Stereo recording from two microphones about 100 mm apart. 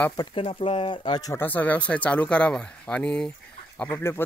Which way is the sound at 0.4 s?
65° left (ahead or behind).